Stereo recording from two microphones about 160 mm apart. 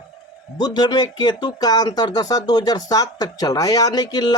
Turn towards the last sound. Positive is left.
turn(degrees=25)  # may be behind; listen again after turning